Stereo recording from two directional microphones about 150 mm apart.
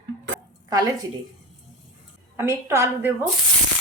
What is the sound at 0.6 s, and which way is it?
Speech, 25° right (ahead or behind).